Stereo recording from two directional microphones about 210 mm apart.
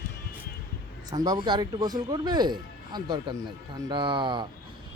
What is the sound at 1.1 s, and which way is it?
Speech, 20° right (ahead or behind).